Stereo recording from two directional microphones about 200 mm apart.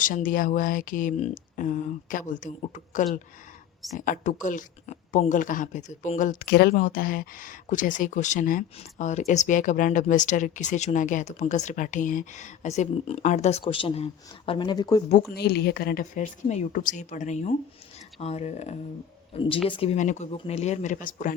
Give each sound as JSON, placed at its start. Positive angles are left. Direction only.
{"t": 0.0, "sound": "a woman's voice", "side_deg": 45}
{"t": 15.3, "sound": "a woman's voice", "side_deg": 55}